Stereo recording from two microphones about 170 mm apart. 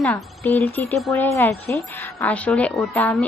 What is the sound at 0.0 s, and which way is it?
A woman's voice, 10° left (ahead or behind).